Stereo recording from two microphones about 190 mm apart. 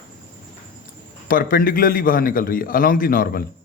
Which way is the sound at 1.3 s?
50° left (ahead or behind).